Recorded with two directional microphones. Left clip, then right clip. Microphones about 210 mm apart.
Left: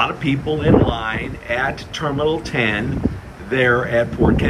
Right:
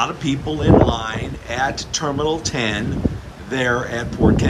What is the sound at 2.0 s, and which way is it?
A man's voice, 15° right (ahead or behind).